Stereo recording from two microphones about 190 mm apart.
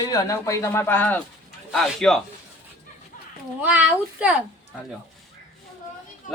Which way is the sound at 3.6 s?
10° right (ahead or behind).